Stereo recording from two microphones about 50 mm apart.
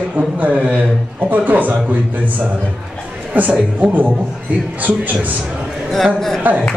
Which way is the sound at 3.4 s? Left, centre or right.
Right.